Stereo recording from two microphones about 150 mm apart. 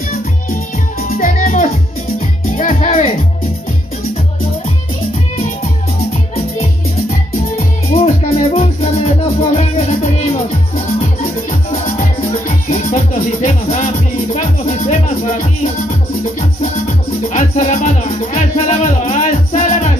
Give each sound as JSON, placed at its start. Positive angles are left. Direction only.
{"t": 1.1, "sound": "music", "side_deg": 65}
{"t": 7.5, "sound": "music", "side_deg": 40}
{"t": 11.8, "sound": "music", "side_deg": 55}
{"t": 14.3, "sound": "speech", "side_deg": 50}
{"t": 17.3, "sound": "music", "side_deg": 55}